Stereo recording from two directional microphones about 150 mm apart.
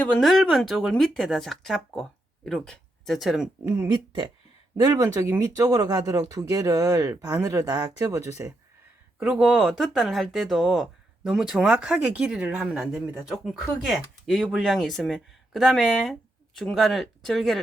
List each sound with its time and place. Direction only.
0.0 s speech: 10° left (ahead or behind)
0.3 s speech: centre (ahead or behind)
3.8 s speech: 30° right (ahead or behind)
9.1 s speech: 5° right (ahead or behind)
13.9 s speech: centre (ahead or behind)